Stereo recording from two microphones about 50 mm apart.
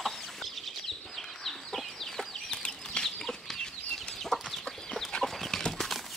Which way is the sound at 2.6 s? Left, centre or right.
Centre.